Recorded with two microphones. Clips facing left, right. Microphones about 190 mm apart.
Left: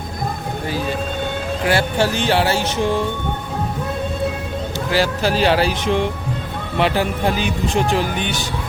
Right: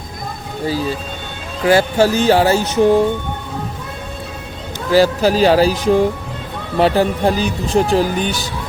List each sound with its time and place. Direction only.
2.0 s speech: 40° right (ahead or behind)
4.9 s speech: 40° right (ahead or behind)